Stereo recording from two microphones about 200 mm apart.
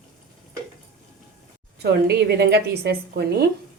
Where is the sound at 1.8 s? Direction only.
55° right (ahead or behind).